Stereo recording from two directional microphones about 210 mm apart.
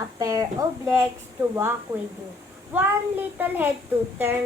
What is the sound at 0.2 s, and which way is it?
Speech, 15° right (ahead or behind).